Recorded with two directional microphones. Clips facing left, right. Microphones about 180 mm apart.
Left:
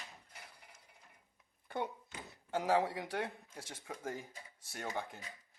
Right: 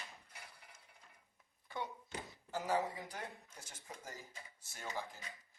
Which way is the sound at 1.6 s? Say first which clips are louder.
Left 5 dB; 55° left (ahead or behind).